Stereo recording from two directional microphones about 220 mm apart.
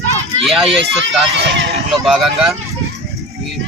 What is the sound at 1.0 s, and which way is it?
Speech, 55° right (ahead or behind).